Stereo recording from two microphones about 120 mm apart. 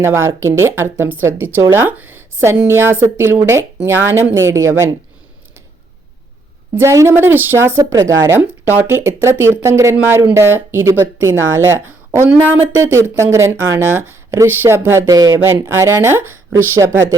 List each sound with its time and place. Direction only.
0.0 s speech: 20° right (ahead or behind)
6.7 s speech: 25° right (ahead or behind)